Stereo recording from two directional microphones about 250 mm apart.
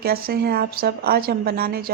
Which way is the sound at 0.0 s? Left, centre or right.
Right.